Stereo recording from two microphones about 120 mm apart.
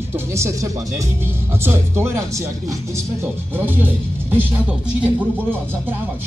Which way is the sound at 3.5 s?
15° right (ahead or behind).